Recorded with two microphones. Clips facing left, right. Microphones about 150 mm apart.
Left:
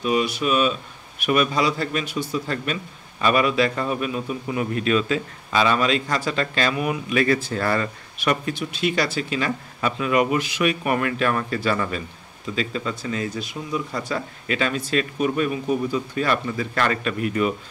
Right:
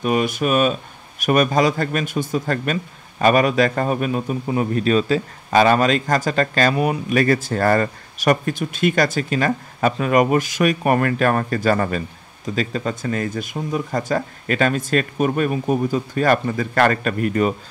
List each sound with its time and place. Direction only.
0.0 s a man's voice: 50° right (ahead or behind)